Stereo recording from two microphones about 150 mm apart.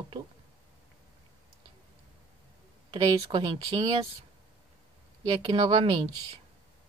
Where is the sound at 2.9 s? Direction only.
25° right (ahead or behind).